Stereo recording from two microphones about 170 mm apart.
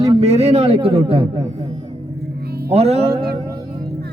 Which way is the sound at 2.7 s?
35° right (ahead or behind).